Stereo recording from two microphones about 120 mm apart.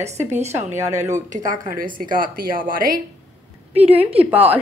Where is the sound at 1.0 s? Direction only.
85° right.